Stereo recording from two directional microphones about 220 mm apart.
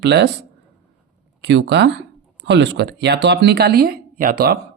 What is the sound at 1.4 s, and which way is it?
Speech, 55° right (ahead or behind).